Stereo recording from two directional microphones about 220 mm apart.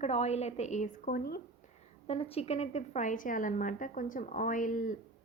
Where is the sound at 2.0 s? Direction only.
25° left (ahead or behind).